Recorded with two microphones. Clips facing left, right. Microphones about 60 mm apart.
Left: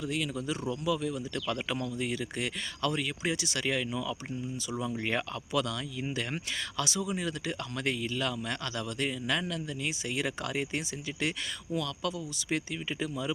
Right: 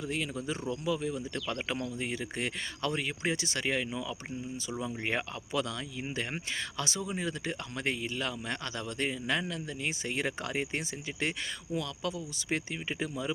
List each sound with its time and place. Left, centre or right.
0.0 s speech: right